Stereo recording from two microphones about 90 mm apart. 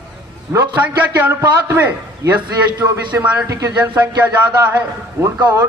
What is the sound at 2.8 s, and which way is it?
Speech, 20° right (ahead or behind).